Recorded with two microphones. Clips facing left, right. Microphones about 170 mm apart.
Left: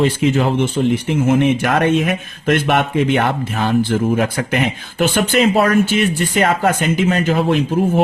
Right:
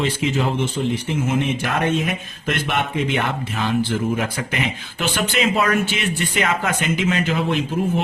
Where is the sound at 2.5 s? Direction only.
60° left (ahead or behind); by 7.6 s 40° left (ahead or behind).